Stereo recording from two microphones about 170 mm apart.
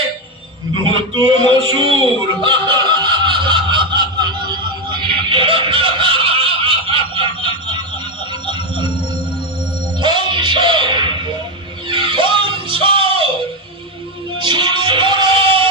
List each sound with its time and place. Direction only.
0.7 s a man's voice: 30° right (ahead or behind)
1.4 s a sound: 30° right (ahead or behind)
2.4 s snicker: 30° right (ahead or behind)
8.5 s music: 25° right (ahead or behind)
9.9 s music: 30° right (ahead or behind)
14.4 s music: 25° right (ahead or behind)